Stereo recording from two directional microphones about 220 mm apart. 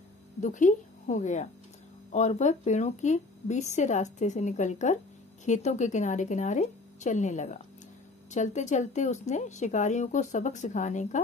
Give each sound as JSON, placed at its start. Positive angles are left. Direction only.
{"t": 0.4, "sound": "speech", "side_deg": 35}